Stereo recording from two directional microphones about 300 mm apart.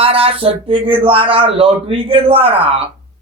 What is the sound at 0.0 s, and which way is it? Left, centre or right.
Speech, centre.